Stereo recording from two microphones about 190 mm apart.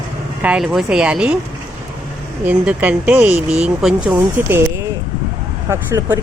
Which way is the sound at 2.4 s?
10° right (ahead or behind).